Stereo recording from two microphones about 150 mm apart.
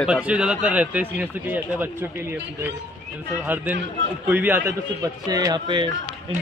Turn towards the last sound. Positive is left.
turn(degrees=-30)  # may be behind; listen again after turning